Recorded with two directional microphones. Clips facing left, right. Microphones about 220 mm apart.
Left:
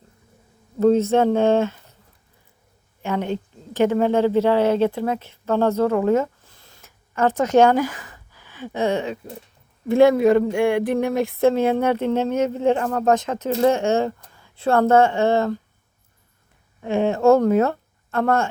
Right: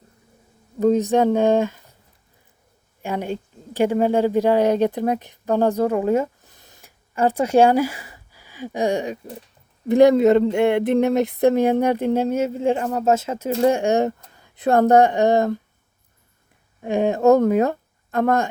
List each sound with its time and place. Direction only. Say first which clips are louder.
0.8 s speech: left 1 dB; 15° right (ahead or behind)
3.0 s speech: left 2 dB; 10° right (ahead or behind)
9.9 s a sound: right 1 dB; 20° right (ahead or behind)
11.8 s speech: right 1 dB; 15° right (ahead or behind)
16.8 s speech: even; 15° right (ahead or behind)